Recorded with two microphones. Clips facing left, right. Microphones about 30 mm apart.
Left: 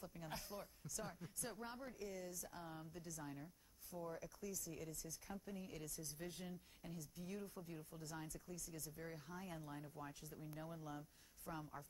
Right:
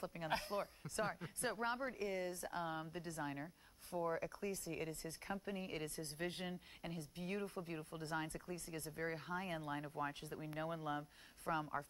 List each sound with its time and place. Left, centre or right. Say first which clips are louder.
0.0 s speech: right 10 dB; right